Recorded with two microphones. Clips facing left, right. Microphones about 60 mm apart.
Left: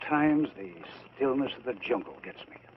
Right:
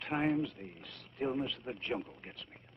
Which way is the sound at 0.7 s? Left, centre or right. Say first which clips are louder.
Left 6 dB; left.